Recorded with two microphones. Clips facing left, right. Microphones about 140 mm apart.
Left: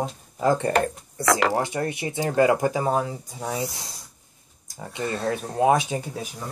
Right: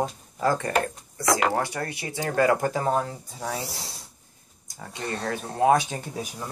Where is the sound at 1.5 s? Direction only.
20° left (ahead or behind).